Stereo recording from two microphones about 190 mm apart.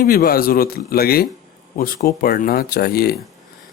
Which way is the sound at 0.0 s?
50° left (ahead or behind).